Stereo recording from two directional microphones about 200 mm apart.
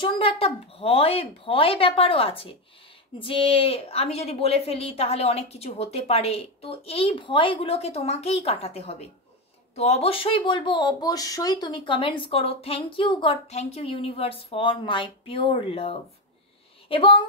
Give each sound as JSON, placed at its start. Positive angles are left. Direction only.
{"t": 0.0, "sound": "a woman's voice", "side_deg": 25}